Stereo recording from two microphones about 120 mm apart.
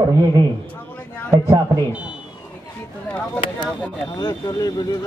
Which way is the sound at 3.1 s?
10° left (ahead or behind).